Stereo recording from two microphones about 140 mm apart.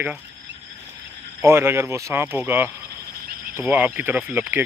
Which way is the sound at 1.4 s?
15° right (ahead or behind).